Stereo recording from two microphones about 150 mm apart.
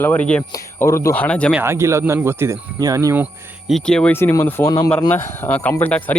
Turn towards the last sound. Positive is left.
turn(degrees=10)  # may be behind; listen again after turning